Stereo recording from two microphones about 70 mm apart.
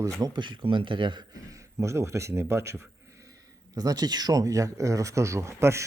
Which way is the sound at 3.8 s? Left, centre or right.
Right.